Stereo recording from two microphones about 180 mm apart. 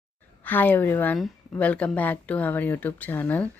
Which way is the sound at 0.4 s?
10° left (ahead or behind).